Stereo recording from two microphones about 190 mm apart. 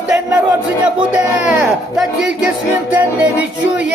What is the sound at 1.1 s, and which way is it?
Speech, 5° right (ahead or behind).